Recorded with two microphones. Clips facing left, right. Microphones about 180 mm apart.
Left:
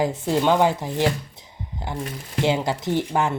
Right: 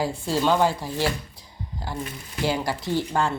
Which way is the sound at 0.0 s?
20° left (ahead or behind).